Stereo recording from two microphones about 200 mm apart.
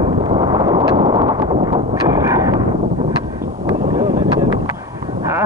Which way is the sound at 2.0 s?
15° right (ahead or behind).